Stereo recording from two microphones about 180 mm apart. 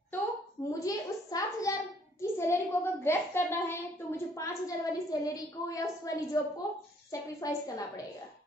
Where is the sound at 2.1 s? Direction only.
15° left (ahead or behind).